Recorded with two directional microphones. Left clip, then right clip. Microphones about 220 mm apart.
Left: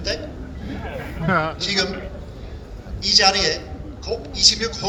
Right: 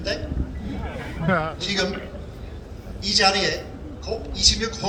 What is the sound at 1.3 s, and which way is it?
Speech, 50° left (ahead or behind).